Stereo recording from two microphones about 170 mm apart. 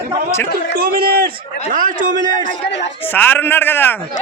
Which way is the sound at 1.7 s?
50° right (ahead or behind).